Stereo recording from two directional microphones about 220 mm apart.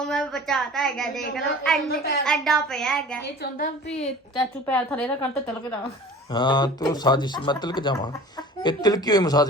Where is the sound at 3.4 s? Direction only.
45° left (ahead or behind).